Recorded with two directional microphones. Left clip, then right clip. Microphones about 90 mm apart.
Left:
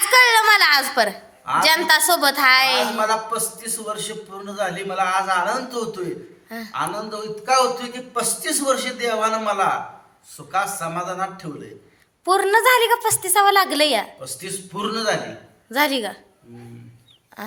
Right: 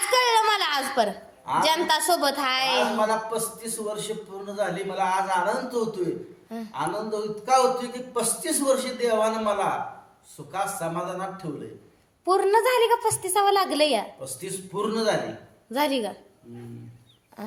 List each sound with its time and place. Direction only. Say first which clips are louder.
0.1 s a sound: left 7 dB; 10° left (ahead or behind)
1.6 s a woman's voice: left 7 dB; 10° left (ahead or behind)
3.0 s a man's voice: left 4 dB; 25° right (ahead or behind)
6.5 s a woman's voice: left 5 dB; 10° left (ahead or behind)
6.7 s a man's voice: left 2 dB; 25° right (ahead or behind)
12.2 s a woman's voice: left 4 dB; 5° left (ahead or behind)
14.4 s a man's voice: left 2 dB; 30° right (ahead or behind)
15.7 s a woman's voice: left 5 dB; 5° left (ahead or behind)